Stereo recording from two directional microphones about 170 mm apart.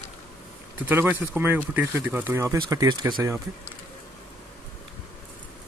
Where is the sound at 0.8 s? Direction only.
10° right (ahead or behind); by 3.3 s 25° right (ahead or behind).